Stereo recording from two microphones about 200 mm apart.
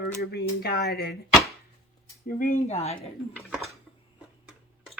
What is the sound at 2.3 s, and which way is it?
Speech, 40° left (ahead or behind).